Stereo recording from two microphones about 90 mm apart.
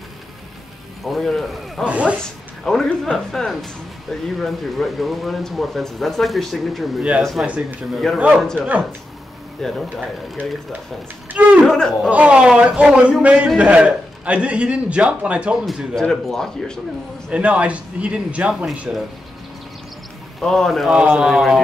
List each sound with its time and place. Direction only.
1.0 s speech: centre (ahead or behind)
1.9 s a man's voice: 15° right (ahead or behind)
2.6 s speech: 5° left (ahead or behind)
7.0 s a man's voice: 15° right (ahead or behind)
8.4 s speech: 5° left (ahead or behind)
11.3 s a man's voice: 15° right (ahead or behind)
11.6 s speech: 5° left (ahead or behind)
12.1 s a man's voice: 15° right (ahead or behind)
15.6 s speech: 5° left (ahead or behind)
17.3 s a man's voice: 15° right (ahead or behind)
20.3 s speech: 5° left (ahead or behind)
20.9 s a man's voice: 15° right (ahead or behind)